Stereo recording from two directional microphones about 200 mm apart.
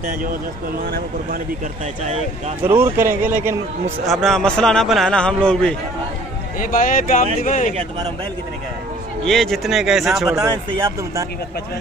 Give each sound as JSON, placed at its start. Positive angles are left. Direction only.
{"t": 2.6, "sound": "a man's voice", "side_deg": -10}
{"t": 4.0, "sound": "a man's voice", "side_deg": 0}
{"t": 6.6, "sound": "speech", "side_deg": 45}
{"t": 9.2, "sound": "a man's voice", "side_deg": 0}
{"t": 10.3, "sound": "a man's voice", "side_deg": -15}